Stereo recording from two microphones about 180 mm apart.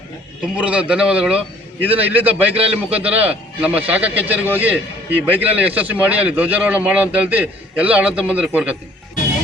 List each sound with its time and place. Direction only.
0.5 s speech: 5° right (ahead or behind)
2.3 s a man's voice: 30° right (ahead or behind)
3.0 s speech: 10° right (ahead or behind)